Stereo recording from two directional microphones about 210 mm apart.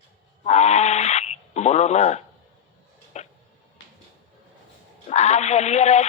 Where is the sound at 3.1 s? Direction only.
30° left (ahead or behind).